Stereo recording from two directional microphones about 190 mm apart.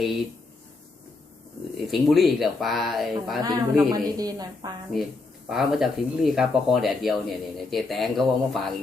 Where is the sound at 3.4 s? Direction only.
20° right (ahead or behind).